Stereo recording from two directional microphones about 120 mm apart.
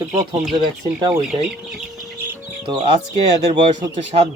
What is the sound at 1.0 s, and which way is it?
Speech, 30° right (ahead or behind).